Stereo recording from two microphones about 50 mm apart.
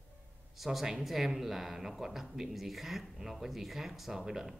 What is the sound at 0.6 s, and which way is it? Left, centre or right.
Speech, centre.